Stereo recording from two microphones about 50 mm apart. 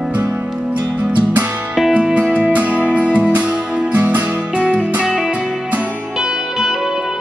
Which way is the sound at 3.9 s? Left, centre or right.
Right.